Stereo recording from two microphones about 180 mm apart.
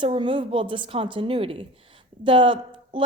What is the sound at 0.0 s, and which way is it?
A woman's voice, 30° right (ahead or behind).